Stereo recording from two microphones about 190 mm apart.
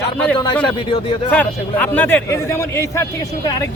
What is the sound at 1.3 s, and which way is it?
A man's voice, 10° left (ahead or behind).